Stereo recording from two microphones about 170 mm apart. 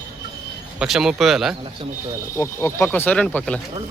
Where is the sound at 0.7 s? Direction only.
Centre (ahead or behind).